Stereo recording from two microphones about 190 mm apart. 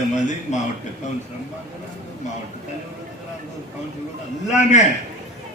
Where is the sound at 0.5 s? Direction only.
40° left (ahead or behind).